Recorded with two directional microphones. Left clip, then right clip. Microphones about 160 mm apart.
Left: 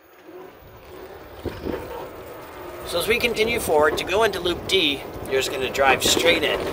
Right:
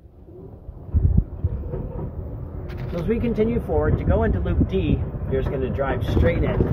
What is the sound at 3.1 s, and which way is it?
Speech, 25° left (ahead or behind).